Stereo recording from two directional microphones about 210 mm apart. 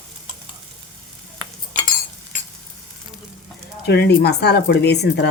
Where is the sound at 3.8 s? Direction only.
55° left (ahead or behind).